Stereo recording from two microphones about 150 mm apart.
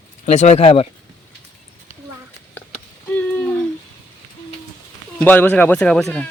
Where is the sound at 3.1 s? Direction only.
10° left (ahead or behind).